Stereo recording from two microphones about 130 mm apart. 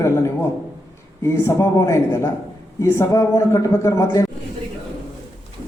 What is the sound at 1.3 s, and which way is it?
A man's voice, 20° left (ahead or behind).